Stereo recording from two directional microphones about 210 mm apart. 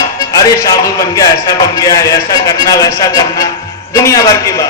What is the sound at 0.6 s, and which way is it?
A man's voice, 15° left (ahead or behind).